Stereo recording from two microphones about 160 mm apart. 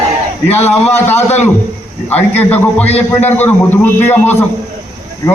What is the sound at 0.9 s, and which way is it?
A man's voice, 15° left (ahead or behind).